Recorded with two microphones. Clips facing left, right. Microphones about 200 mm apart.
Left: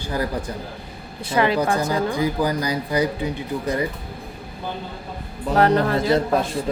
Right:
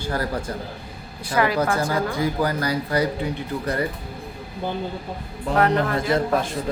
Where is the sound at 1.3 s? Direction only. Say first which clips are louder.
Left 1 dB; 25° left (ahead or behind).